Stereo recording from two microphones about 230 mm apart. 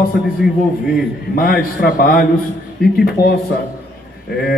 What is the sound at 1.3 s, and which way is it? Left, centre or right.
Speech, left.